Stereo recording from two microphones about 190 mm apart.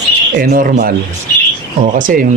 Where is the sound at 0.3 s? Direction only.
45° right (ahead or behind).